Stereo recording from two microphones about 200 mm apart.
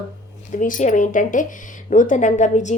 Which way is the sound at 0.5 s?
40° left (ahead or behind).